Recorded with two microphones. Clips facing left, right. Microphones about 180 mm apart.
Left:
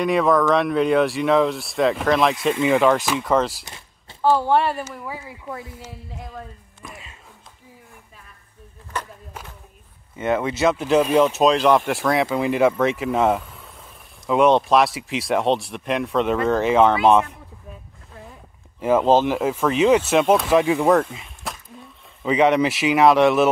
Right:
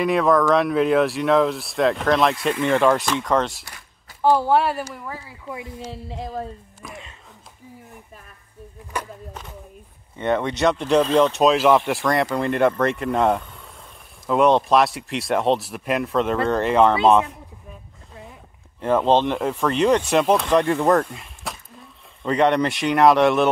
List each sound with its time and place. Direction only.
0.0 s speech: centre (ahead or behind)
3.6 s a sound: 25° left (ahead or behind)
4.2 s speech: 10° right (ahead or behind); by 5.2 s 5° left (ahead or behind)
6.1 s speech: 35° right (ahead or behind)
6.8 s speech: centre (ahead or behind)
8.9 s a sound: 10° right (ahead or behind)
10.1 s speech: 5° left (ahead or behind)
18.8 s speech: 5° left (ahead or behind)